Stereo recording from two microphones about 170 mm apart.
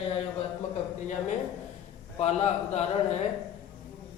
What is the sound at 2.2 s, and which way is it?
Speech, 40° left (ahead or behind).